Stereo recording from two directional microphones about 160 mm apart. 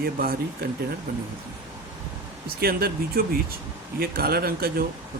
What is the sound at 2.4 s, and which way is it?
Speech, 70° right (ahead or behind).